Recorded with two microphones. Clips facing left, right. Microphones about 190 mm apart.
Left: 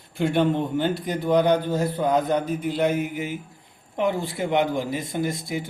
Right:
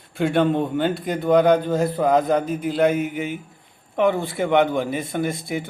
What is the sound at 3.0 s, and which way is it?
A man's voice, 60° right (ahead or behind).